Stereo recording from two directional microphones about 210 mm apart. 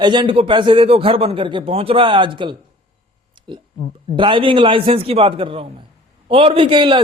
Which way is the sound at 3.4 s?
20° right (ahead or behind).